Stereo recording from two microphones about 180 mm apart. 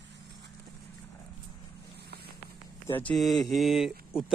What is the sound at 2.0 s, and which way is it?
Vehicle, 65° right (ahead or behind).